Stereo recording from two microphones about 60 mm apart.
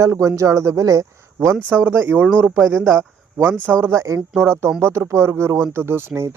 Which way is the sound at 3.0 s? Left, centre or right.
Right.